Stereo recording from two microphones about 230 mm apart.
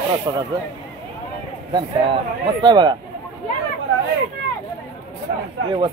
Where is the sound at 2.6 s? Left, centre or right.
Centre.